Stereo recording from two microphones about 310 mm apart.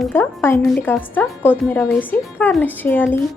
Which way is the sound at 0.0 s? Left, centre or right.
Centre.